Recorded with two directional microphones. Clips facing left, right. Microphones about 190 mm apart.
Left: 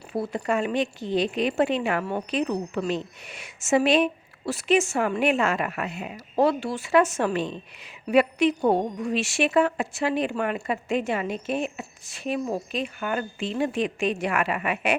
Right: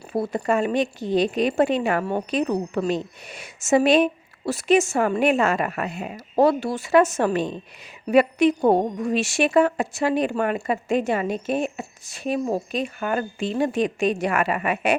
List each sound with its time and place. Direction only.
0.1 s a woman's voice: 40° right (ahead or behind)